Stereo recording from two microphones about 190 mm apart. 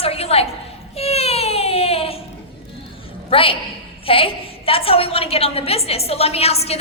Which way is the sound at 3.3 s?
30° left (ahead or behind).